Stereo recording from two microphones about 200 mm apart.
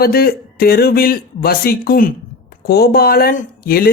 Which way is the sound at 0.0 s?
50° left (ahead or behind).